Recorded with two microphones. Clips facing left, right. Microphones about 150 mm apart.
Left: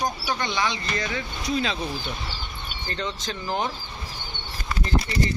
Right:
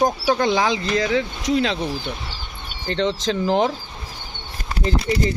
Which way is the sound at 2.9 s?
90° right.